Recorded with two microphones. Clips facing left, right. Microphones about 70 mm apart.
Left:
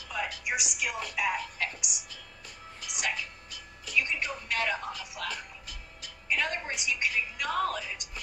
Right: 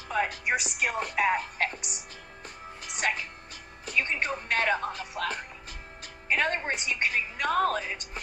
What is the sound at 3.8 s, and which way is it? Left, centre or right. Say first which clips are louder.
A woman's voice: right 2 dB; right.